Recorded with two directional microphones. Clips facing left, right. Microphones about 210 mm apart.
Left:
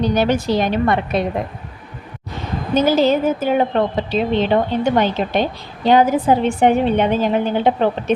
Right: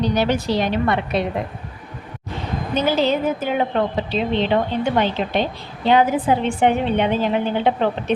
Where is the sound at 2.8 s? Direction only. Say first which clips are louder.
Left 4 dB; 45° left (ahead or behind).